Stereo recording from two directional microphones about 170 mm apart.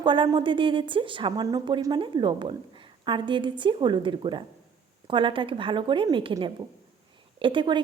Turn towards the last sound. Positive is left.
turn(degrees=-30)  # may be behind; listen again after turning